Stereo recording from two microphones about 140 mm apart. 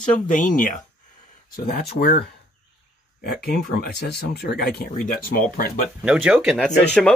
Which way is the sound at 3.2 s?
90° left.